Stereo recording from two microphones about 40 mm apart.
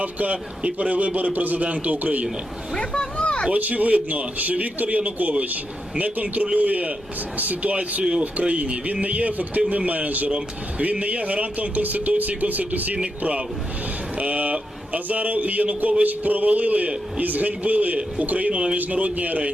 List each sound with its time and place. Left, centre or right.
0.0 s speech: right
2.7 s a sound: centre
3.5 s speech: right
14.2 s speech: right